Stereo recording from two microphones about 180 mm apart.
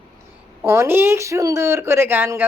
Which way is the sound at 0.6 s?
15° right (ahead or behind).